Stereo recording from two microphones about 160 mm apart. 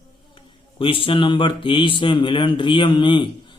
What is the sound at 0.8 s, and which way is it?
Mantra, 35° left (ahead or behind).